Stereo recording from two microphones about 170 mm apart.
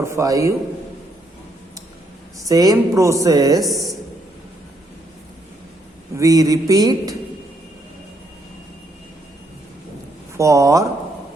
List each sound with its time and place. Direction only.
0.0 s a man's voice: 15° right (ahead or behind)
2.5 s a woman's voice: 20° right (ahead or behind)
6.1 s a woman's voice: 20° right (ahead or behind)
10.3 s a woman's voice: 20° right (ahead or behind)